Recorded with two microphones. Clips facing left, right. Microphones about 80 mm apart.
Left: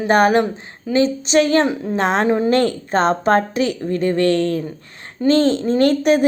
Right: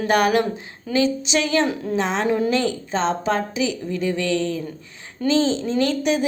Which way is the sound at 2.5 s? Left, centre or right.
Left.